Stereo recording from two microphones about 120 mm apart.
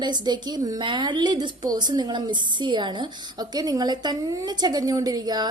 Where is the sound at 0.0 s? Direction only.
35° right (ahead or behind).